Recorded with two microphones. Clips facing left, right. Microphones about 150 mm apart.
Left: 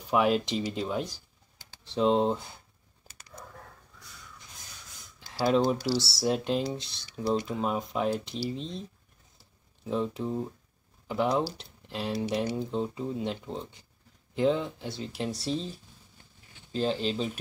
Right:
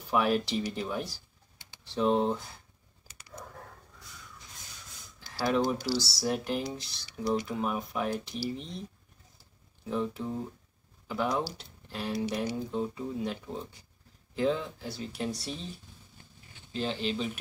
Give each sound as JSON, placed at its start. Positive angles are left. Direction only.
{"t": 0.1, "sound": "speech", "side_deg": 20}
{"t": 5.4, "sound": "speech", "side_deg": 20}
{"t": 9.4, "sound": "a sound", "side_deg": 20}
{"t": 11.1, "sound": "speech", "side_deg": 25}
{"t": 16.7, "sound": "speech", "side_deg": 35}